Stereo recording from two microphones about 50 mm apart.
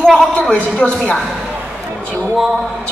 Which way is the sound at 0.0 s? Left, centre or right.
Centre.